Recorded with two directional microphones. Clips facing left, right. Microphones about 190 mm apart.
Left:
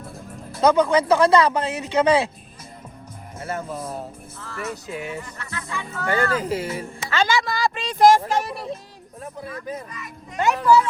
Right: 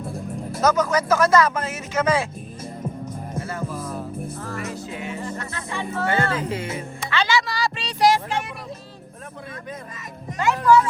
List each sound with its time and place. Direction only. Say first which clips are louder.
0.6 s speech: left 3 dB; 30° left (ahead or behind)
3.4 s music: left 6 dB; 25° left (ahead or behind)
4.4 s music: right 1 dB; 40° right (ahead or behind)
6.1 s speech: left 3 dB; 25° right (ahead or behind)
6.4 s speech: left 2 dB; 35° left (ahead or behind)